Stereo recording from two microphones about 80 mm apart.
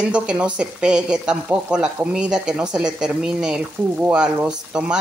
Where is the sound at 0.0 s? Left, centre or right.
Centre.